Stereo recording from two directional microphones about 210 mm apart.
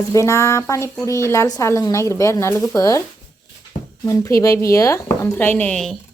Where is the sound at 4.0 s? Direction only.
15° left (ahead or behind).